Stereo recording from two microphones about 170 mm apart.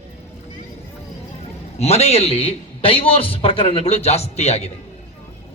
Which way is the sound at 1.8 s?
40° left (ahead or behind).